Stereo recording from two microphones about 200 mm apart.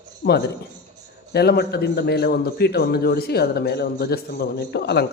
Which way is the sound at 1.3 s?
55° left (ahead or behind).